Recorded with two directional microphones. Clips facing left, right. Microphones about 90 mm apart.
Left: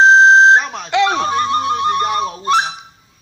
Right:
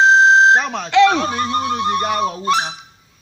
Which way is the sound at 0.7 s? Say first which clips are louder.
Right 3 dB; 15° left (ahead or behind).